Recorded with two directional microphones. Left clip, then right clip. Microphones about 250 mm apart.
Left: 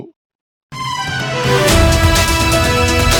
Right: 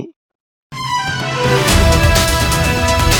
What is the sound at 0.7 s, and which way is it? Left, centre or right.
Music, centre.